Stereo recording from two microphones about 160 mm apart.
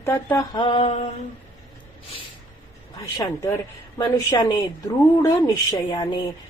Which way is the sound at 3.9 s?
25° left (ahead or behind).